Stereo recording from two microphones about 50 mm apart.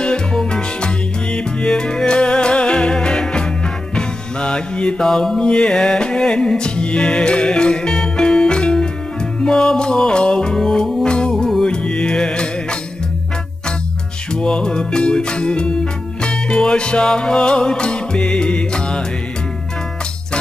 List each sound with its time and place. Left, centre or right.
0.0 s music: centre
5.0 s music: centre
14.3 s music: centre